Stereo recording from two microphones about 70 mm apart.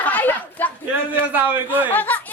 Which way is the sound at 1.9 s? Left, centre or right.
Left.